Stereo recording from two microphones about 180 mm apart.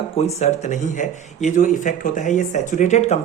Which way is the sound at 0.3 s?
40° left (ahead or behind).